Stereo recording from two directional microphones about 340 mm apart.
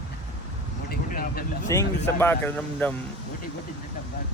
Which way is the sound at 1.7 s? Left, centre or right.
Centre.